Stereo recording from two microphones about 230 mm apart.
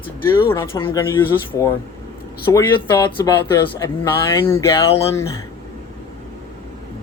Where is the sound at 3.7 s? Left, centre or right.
Centre.